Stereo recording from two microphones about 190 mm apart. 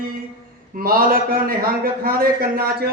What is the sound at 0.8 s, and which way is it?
A man's voice, 50° right (ahead or behind).